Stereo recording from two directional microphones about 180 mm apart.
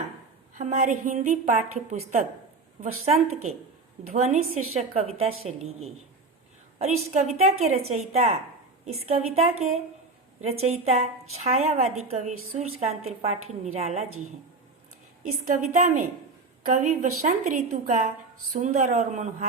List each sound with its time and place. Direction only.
0.5 s a woman's voice: 45° right (ahead or behind)
15.3 s a woman's voice: 45° right (ahead or behind)